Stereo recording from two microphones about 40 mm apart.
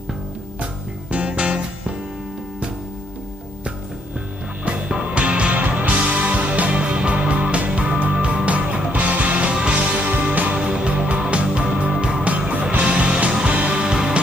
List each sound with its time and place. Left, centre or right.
1.1 s music: right
4.6 s music: right
5.6 s music: right
10.0 s music: right
12.3 s music: right
13.8 s music: right